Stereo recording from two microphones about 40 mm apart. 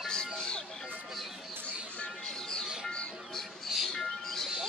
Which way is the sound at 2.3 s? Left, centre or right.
Centre.